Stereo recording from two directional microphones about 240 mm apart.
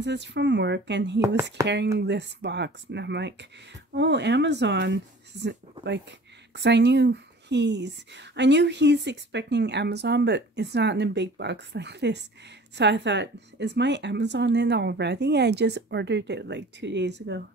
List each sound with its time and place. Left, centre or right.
0.0 s speech: right
1.2 s speech: centre
2.0 s speech: right